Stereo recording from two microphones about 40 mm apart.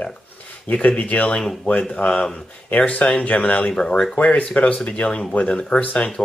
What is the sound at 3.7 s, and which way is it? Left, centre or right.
Speech, left.